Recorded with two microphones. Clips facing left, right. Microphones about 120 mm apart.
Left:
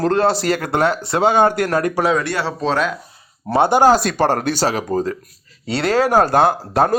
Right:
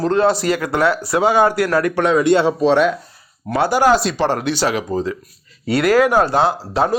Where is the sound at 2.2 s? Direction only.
20° right (ahead or behind).